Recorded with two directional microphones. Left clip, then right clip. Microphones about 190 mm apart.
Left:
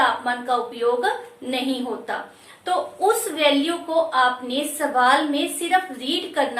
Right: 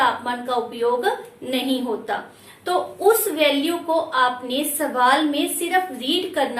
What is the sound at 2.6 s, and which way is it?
A woman's voice, 15° left (ahead or behind).